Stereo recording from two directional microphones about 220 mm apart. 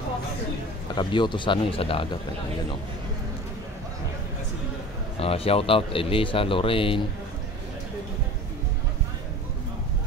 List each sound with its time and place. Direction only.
0.9 s speech: 20° left (ahead or behind)
5.2 s speech: 25° left (ahead or behind)